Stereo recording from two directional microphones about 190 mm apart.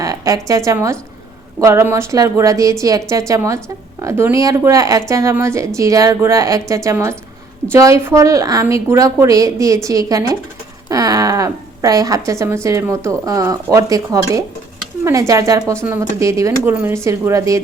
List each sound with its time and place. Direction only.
0.0 s a woman's voice: 20° right (ahead or behind)